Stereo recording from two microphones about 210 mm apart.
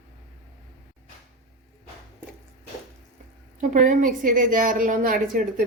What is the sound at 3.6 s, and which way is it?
A woman's voice, 40° right (ahead or behind).